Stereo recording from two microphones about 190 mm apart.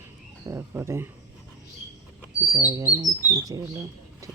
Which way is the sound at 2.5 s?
15° right (ahead or behind).